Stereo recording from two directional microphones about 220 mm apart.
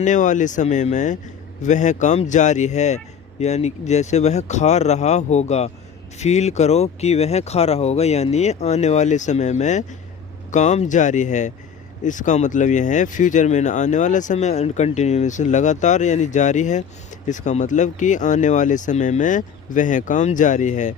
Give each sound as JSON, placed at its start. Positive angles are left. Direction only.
{"t": 0.0, "sound": "speech", "side_deg": 35}